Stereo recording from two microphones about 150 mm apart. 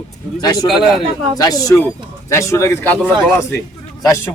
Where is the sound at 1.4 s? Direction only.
25° left (ahead or behind).